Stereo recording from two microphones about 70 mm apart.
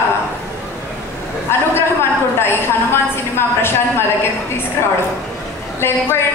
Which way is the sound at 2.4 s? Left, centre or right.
Left.